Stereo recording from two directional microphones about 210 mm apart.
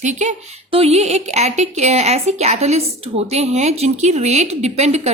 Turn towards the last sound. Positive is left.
turn(degrees=-30)  # may be behind; listen again after turning